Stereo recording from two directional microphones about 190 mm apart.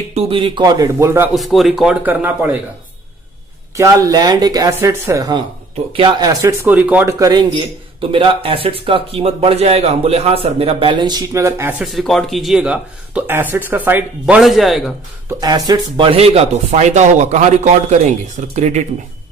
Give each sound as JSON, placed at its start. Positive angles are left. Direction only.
{"t": 0.1, "sound": "a man's voice", "side_deg": -25}
{"t": 1.3, "sound": "speech", "side_deg": 0}
{"t": 3.7, "sound": "a man's voice", "side_deg": -15}
{"t": 11.8, "sound": "speech", "side_deg": 0}
{"t": 15.2, "sound": "speech", "side_deg": -20}